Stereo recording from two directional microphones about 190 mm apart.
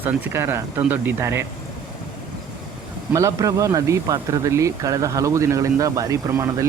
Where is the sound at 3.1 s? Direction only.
15° right (ahead or behind).